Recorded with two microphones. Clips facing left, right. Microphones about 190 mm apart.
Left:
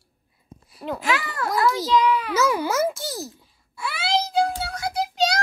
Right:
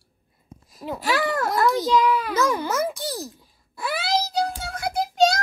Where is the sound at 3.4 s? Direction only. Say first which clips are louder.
Right 2 dB; 40° right (ahead or behind).